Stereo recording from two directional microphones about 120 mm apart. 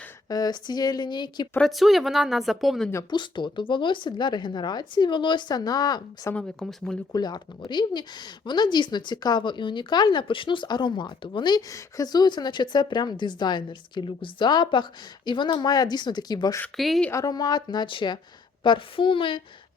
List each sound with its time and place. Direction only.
0.3 s speech: 35° left (ahead or behind)
1.5 s a woman's voice: centre (ahead or behind)
3.1 s speech: 40° left (ahead or behind)
6.3 s a woman's voice: 5° left (ahead or behind)
7.1 s speech: 35° left (ahead or behind)
16.7 s a woman's voice: centre (ahead or behind)
17.1 s a woman's voice: 30° left (ahead or behind); by 19.4 s 45° left (ahead or behind)